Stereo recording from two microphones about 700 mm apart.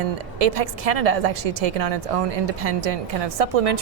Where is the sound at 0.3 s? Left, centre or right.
Right.